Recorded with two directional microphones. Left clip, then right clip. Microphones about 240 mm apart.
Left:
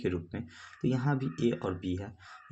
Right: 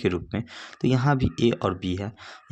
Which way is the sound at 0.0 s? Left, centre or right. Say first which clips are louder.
Right 8 dB; right.